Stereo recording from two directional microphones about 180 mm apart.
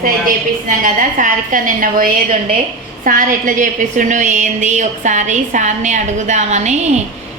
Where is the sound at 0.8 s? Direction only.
50° right (ahead or behind).